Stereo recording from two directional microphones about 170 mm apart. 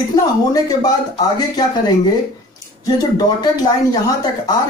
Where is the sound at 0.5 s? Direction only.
20° left (ahead or behind).